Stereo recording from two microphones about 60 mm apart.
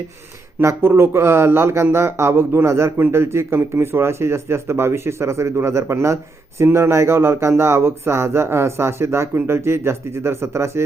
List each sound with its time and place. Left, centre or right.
0.6 s speech: right